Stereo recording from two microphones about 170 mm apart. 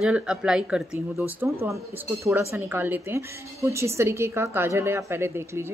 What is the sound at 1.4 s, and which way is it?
A woman's voice, 15° right (ahead or behind).